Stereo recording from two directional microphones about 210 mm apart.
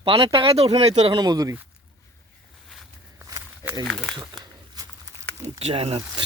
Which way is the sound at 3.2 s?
15° right (ahead or behind).